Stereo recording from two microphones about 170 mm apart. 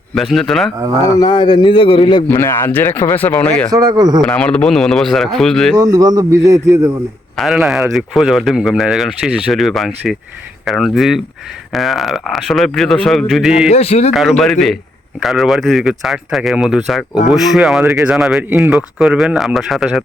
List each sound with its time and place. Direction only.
0.1 s speech: centre (ahead or behind)
1.0 s a man's voice: 20° left (ahead or behind)
2.2 s speech: 15° left (ahead or behind)
3.7 s speech: 20° right (ahead or behind)
4.2 s speech: 5° left (ahead or behind)
5.7 s speech: 20° right (ahead or behind)
7.3 s speech: centre (ahead or behind)
13.7 s speech: 40° left (ahead or behind)
14.1 s speech: centre (ahead or behind)